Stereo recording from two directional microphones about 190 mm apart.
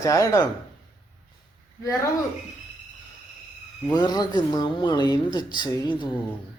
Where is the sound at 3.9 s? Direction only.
20° left (ahead or behind).